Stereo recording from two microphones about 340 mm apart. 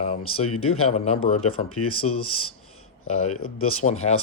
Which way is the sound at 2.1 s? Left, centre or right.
Left.